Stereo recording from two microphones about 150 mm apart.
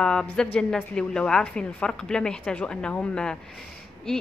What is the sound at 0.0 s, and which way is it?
A woman's voice, 5° left (ahead or behind).